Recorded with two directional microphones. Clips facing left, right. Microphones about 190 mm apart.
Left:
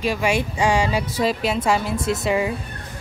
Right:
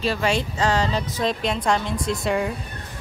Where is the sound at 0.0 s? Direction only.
10° left (ahead or behind).